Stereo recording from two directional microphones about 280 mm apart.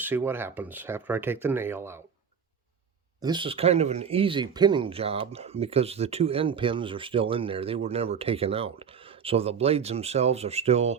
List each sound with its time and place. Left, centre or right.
0.0 s speech: centre
3.2 s speech: centre